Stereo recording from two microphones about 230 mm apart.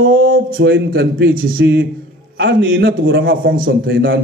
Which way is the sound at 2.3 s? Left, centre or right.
Right.